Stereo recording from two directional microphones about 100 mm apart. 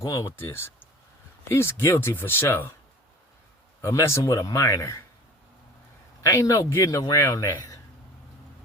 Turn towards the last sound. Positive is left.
turn(degrees=35)  # may be behind; listen again after turning